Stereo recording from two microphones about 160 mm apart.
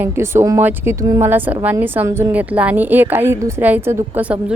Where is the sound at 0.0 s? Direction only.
15° right (ahead or behind).